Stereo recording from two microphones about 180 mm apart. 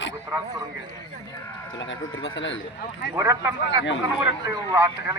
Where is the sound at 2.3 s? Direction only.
90° left.